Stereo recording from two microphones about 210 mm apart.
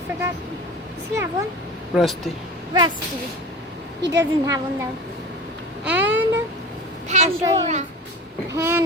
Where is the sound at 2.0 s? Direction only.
Centre (ahead or behind).